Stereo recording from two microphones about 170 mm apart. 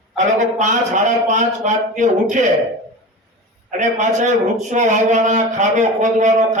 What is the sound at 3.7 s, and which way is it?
A man's voice, 45° right (ahead or behind).